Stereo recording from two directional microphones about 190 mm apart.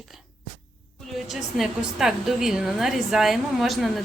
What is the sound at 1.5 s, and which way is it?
A woman's voice, centre (ahead or behind).